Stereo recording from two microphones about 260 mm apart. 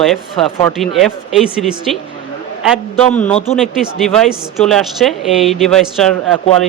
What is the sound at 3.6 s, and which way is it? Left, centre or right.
A woman's voice, centre.